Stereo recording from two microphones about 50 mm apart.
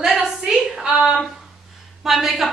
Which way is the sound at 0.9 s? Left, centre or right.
Centre.